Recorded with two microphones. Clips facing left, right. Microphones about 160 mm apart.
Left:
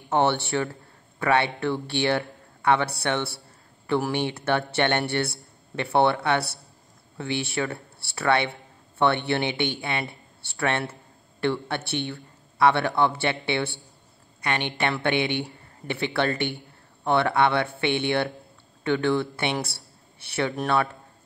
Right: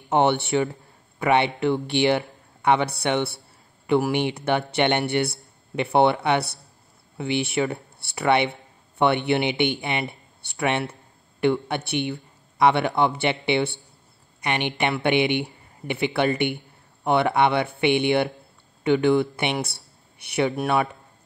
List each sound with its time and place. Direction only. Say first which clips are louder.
0.1 s a man's voice: right 3 dB; 15° right (ahead or behind)